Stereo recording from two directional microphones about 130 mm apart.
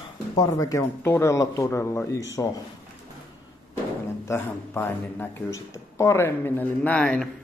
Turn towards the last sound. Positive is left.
turn(degrees=10)  # may be behind; listen again after turning